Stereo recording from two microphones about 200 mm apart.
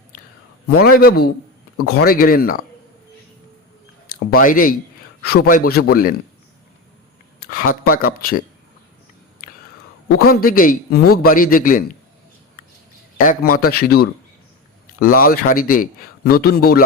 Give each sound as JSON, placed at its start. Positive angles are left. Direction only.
{"t": 0.8, "sound": "a man's voice", "side_deg": 50}
{"t": 4.3, "sound": "a man's voice", "side_deg": 45}
{"t": 7.4, "sound": "a man's voice", "side_deg": 45}
{"t": 10.2, "sound": "a man's voice", "side_deg": 50}
{"t": 13.1, "sound": "a man's voice", "side_deg": 45}